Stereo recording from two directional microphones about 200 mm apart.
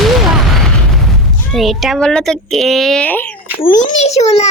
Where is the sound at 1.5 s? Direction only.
Centre (ahead or behind).